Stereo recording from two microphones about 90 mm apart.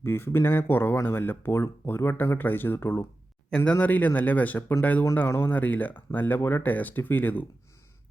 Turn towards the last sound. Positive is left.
turn(degrees=20)  # may be behind; listen again after turning